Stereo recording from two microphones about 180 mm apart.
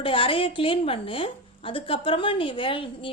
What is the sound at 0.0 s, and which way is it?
Speech, 30° left (ahead or behind).